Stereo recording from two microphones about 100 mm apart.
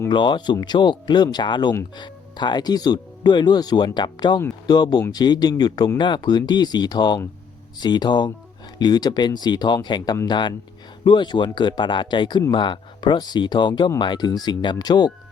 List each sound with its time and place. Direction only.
0.1 s speech: 50° left (ahead or behind)